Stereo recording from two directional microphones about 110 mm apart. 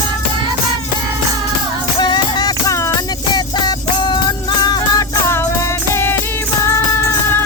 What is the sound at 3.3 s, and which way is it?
Music, 40° left (ahead or behind).